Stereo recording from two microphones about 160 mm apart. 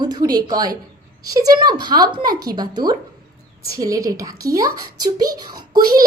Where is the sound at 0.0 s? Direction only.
25° right (ahead or behind).